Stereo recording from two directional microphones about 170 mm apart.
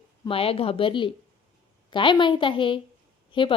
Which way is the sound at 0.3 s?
35° left (ahead or behind).